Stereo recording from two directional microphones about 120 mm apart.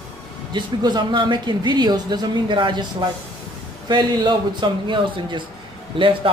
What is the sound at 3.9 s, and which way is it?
Speech, 40° right (ahead or behind).